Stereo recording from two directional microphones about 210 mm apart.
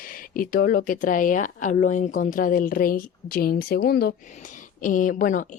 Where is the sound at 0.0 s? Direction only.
40° left (ahead or behind).